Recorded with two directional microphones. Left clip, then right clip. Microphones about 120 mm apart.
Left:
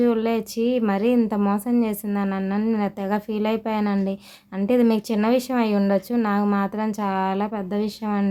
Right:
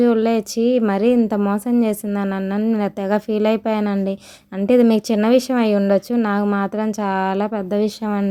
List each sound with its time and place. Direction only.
0.0 s speech: 45° right (ahead or behind)